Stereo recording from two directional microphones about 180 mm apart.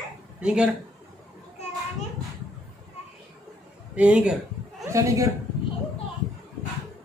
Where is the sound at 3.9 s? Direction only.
5° right (ahead or behind).